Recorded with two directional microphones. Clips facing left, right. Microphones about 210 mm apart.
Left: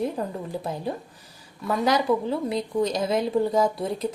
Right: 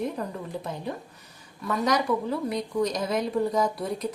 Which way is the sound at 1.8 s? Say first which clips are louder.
Left 3 dB; 30° left (ahead or behind).